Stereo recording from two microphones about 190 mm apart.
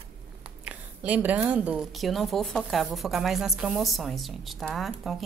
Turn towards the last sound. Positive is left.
turn(degrees=0)  # may be behind; listen again after turning